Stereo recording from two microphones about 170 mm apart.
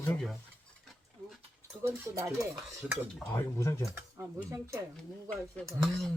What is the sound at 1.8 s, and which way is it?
Stir, 15° right (ahead or behind).